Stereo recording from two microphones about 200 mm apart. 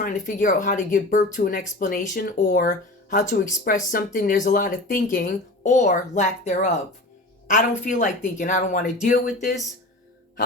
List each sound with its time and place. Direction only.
0.0 s a woman's voice: 40° left (ahead or behind)